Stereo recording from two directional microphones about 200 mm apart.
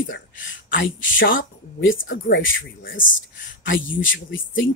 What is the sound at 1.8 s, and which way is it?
Speech, 75° left (ahead or behind).